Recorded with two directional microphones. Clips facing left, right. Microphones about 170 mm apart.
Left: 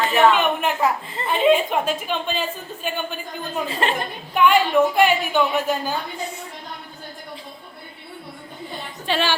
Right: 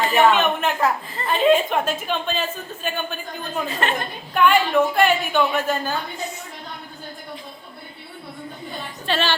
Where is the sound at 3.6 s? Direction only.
30° left (ahead or behind).